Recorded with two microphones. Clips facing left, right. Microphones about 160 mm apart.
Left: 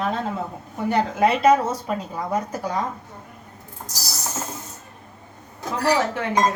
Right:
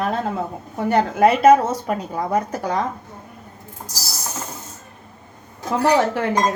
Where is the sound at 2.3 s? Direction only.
60° right (ahead or behind).